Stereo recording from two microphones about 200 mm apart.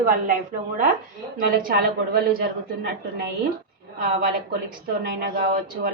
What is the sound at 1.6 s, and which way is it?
Speech, 50° right (ahead or behind).